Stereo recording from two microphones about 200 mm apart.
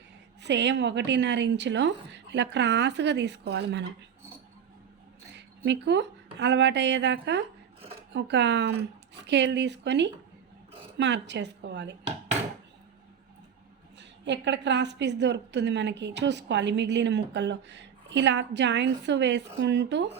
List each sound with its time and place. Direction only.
0.4 s a woman's voice: 60° right (ahead or behind)
5.3 s a woman's voice: 60° right (ahead or behind)
14.0 s a woman's voice: 60° right (ahead or behind)